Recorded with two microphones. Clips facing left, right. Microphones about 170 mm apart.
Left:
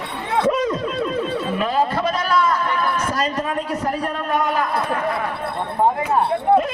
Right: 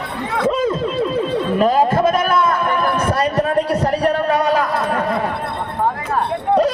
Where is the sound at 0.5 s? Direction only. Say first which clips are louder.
Right 3 dB; 25° right (ahead or behind).